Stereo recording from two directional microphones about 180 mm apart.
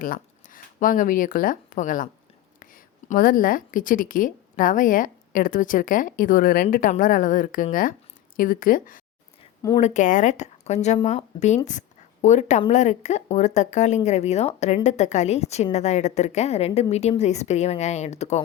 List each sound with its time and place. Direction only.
0.0 s a woman's voice: 50° left (ahead or behind)
9.6 s speech: 15° left (ahead or behind)
9.8 s a woman's voice: 45° left (ahead or behind)